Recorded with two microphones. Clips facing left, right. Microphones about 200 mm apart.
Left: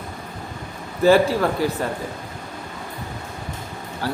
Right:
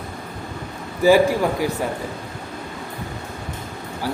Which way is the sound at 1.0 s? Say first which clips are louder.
Right 1 dB; 15° right (ahead or behind).